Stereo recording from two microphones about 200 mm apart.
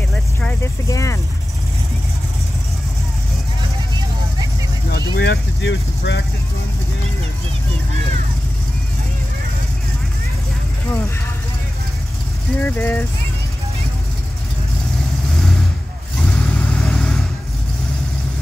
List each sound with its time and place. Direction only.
0.1 s vehicle: 5° left (ahead or behind)
0.8 s speech: 15° left (ahead or behind)
4.9 s vehicle: 60° left (ahead or behind)
12.5 s speech: 10° left (ahead or behind)
16.5 s vehicle: 5° left (ahead or behind)